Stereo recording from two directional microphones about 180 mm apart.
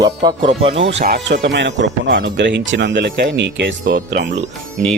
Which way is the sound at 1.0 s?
70° right (ahead or behind).